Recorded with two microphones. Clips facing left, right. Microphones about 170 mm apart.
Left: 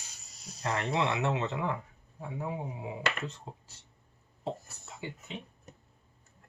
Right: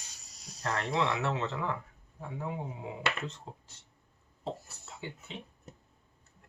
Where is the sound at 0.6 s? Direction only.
15° left (ahead or behind).